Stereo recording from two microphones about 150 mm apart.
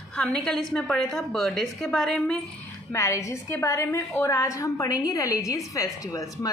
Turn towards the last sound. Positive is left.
turn(degrees=20)  # may be behind; listen again after turning